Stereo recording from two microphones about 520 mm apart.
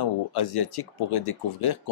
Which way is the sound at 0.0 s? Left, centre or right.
Left.